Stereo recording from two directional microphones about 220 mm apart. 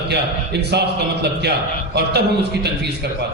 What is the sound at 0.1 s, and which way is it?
A man's voice, 50° right (ahead or behind).